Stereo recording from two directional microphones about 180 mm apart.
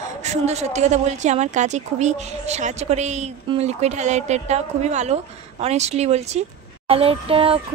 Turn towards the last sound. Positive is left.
turn(degrees=-30)  # may be behind; listen again after turning